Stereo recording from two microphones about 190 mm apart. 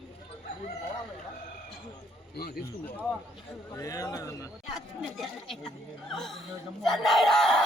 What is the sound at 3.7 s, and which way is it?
Speech, 15° left (ahead or behind).